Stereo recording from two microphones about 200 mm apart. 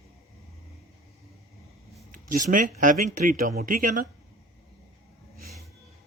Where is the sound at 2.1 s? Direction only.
40° right (ahead or behind).